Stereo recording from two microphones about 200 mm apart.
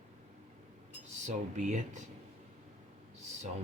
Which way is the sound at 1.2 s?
40° right (ahead or behind).